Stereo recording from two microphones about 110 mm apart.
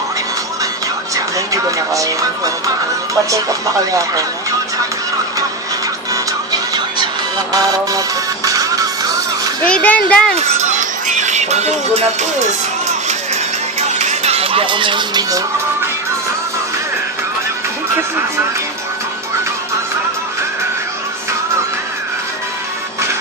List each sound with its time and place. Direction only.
1.9 s speech: 30° right (ahead or behind)
7.5 s speech: 35° right (ahead or behind)
8.4 s music: 30° right (ahead or behind)
9.6 s a child's voice: 10° left (ahead or behind)
11.1 s music: 90° right
14.0 s music: 80° right; by 15.2 s 45° right (ahead or behind)